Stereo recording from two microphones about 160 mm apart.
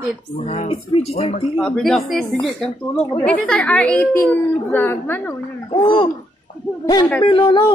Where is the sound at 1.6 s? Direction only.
Centre (ahead or behind).